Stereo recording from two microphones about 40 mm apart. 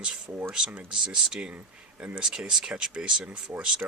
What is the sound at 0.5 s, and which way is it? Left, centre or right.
Speech, right.